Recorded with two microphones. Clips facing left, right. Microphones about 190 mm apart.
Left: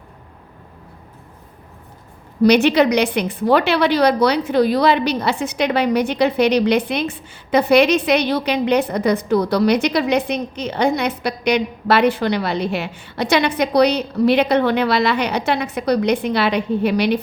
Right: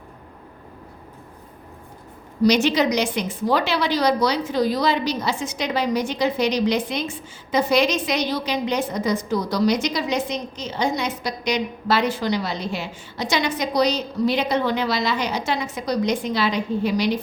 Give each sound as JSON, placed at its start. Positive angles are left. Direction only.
{"t": 2.4, "sound": "a woman's voice", "side_deg": 60}